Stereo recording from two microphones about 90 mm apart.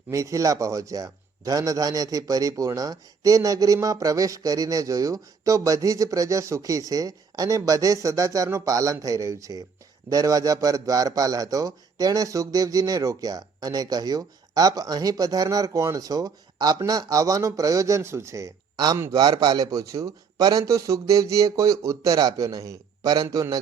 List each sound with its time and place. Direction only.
0.1 s a man's voice: 35° right (ahead or behind)